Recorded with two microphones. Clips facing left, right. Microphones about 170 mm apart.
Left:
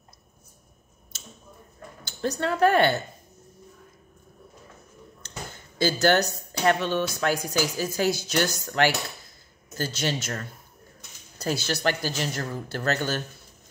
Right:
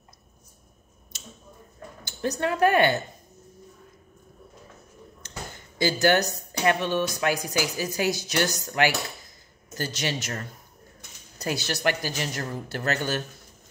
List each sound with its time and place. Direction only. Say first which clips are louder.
2.0 s a woman's voice: even; 15° right (ahead or behind)
5.2 s a sound: even; 15° right (ahead or behind)
7.2 s a woman's voice: left 1 dB; 15° right (ahead or behind)